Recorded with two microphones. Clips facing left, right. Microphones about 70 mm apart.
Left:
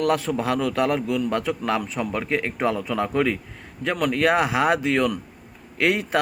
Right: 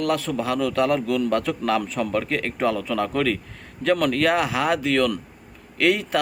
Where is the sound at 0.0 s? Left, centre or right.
Left.